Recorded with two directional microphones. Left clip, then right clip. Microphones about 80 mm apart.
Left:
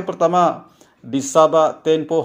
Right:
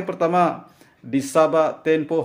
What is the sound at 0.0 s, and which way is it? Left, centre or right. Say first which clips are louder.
A man's voice: left 3 dB; left.